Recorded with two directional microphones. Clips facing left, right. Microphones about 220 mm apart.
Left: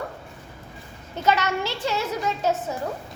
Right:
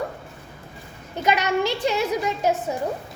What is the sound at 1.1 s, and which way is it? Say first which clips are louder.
A woman's voice: right 1 dB; 15° right (ahead or behind).